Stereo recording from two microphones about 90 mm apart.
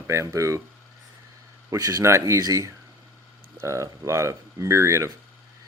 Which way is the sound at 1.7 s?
35° right (ahead or behind).